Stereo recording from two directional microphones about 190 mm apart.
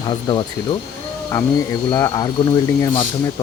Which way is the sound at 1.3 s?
20° left (ahead or behind).